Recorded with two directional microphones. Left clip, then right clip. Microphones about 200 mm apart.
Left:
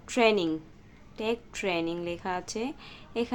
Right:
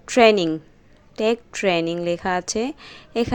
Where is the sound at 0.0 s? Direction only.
35° right (ahead or behind).